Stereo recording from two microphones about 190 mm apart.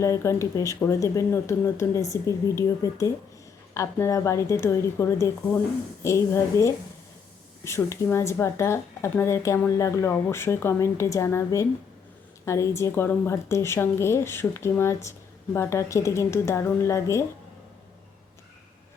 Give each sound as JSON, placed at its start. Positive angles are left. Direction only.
{"t": 0.0, "sound": "speech", "side_deg": 15}